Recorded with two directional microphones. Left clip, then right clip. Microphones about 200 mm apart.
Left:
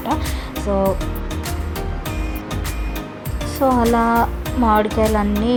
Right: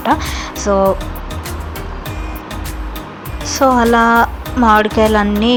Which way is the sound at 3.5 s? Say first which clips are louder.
Right 5 dB; 15° right (ahead or behind).